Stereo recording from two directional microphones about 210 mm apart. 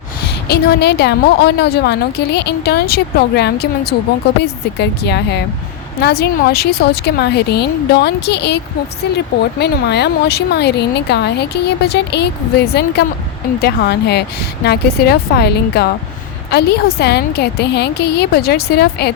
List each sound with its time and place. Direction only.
0.3 s speech: 50° left (ahead or behind)